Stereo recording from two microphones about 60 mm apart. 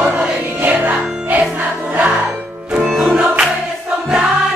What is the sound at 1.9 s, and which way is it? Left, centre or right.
Speech, right.